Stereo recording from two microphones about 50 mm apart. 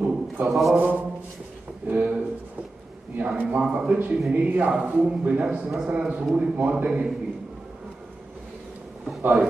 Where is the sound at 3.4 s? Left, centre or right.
Right.